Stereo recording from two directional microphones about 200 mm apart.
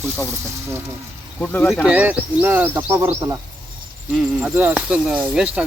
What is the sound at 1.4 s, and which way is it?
Speech, 5° left (ahead or behind).